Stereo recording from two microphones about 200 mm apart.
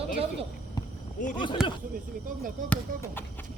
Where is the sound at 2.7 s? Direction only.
10° left (ahead or behind).